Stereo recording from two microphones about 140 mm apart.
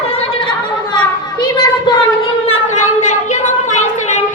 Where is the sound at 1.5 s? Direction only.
30° left (ahead or behind).